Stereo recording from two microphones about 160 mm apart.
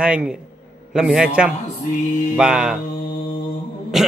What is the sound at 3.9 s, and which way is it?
Speech, centre (ahead or behind).